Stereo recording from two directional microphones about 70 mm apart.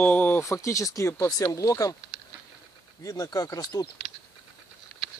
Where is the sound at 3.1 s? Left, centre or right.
Left.